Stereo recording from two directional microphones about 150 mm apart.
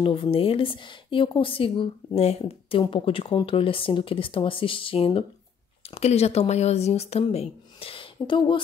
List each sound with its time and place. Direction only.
0.0 s speech: 35° left (ahead or behind)